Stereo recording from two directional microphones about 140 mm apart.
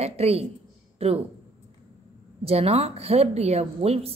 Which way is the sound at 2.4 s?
45° right (ahead or behind).